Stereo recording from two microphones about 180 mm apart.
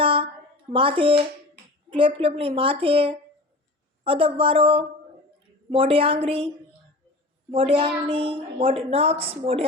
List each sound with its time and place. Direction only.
0.0 s a sound: 30° right (ahead or behind)
0.7 s a woman's voice: 30° right (ahead or behind)
7.5 s a woman's voice: 30° right (ahead or behind)